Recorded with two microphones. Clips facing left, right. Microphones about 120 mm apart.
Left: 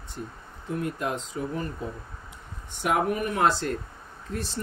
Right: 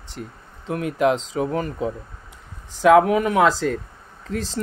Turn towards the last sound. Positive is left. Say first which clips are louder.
# right 6 dB
turn(degrees=-90)